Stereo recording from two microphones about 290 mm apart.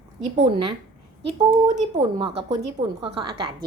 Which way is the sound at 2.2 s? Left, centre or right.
Centre.